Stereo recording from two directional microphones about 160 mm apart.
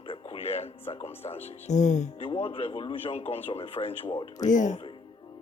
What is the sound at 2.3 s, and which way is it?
Speech, 35° left (ahead or behind).